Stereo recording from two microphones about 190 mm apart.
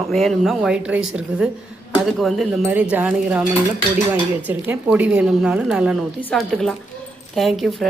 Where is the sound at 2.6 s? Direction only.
10° right (ahead or behind).